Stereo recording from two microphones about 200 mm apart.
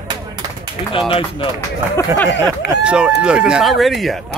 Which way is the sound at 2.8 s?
5° right (ahead or behind).